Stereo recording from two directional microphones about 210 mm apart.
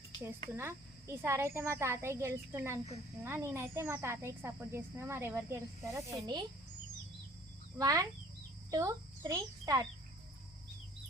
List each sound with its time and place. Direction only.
0.5 s speech: 10° right (ahead or behind)
7.8 s a child's voice: 15° right (ahead or behind)